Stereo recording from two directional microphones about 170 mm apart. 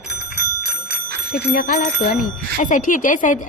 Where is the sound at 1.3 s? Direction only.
60° left (ahead or behind).